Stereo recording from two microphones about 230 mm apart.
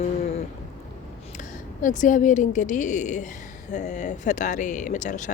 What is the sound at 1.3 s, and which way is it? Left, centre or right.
Speech, left.